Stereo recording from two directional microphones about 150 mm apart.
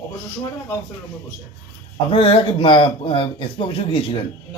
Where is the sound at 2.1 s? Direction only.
35° left (ahead or behind).